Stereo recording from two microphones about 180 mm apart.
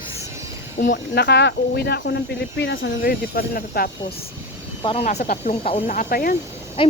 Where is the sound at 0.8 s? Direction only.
55° left (ahead or behind).